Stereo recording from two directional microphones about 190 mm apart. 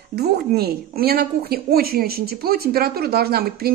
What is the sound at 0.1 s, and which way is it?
Speech, 55° right (ahead or behind).